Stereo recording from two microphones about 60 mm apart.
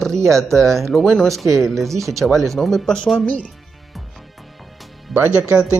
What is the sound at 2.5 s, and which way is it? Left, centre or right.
Speech, centre.